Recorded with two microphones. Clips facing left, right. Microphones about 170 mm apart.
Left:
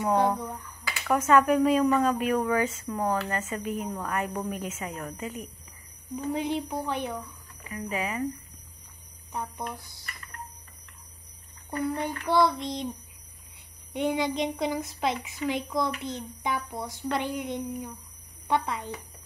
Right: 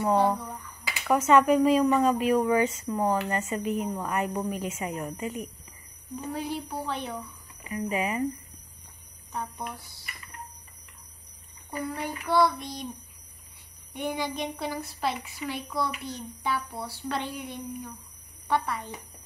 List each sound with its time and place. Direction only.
0.0 s a woman's voice: 15° left (ahead or behind)
0.6 s finger snapping: 15° right (ahead or behind)
1.0 s speech: 10° right (ahead or behind)
6.4 s a woman's voice: 20° left (ahead or behind)
7.6 s speech: 10° right (ahead or behind)
9.3 s a woman's voice: 15° left (ahead or behind)
9.8 s child singing: 20° left (ahead or behind)
11.7 s speech: 5° right (ahead or behind)
12.3 s child singing: 25° left (ahead or behind)
13.9 s a woman's voice: 25° left (ahead or behind)
18.5 s child singing: 20° left (ahead or behind)